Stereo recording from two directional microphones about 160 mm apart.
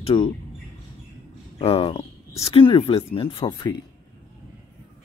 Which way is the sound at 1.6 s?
35° left (ahead or behind).